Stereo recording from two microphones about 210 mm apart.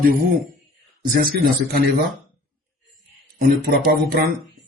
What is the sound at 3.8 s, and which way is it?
Speech, 45° right (ahead or behind).